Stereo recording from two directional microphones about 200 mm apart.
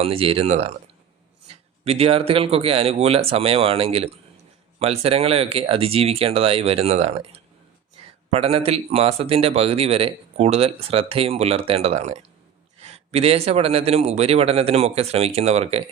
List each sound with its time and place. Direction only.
0.0 s a man's voice: 30° right (ahead or behind)
1.8 s a man's voice: 30° right (ahead or behind)